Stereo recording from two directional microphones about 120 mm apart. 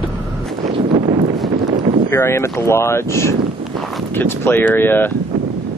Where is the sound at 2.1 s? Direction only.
20° left (ahead or behind).